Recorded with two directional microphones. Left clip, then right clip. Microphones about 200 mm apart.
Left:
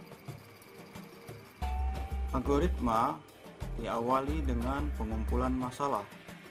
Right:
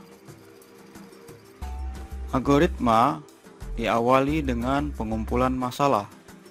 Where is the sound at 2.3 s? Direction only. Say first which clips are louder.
Right 10 dB; 45° right (ahead or behind).